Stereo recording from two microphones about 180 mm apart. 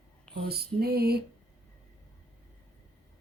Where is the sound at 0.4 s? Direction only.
60° right (ahead or behind).